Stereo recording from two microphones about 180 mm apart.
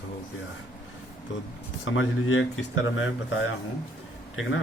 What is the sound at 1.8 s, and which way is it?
A man's voice, 90° left.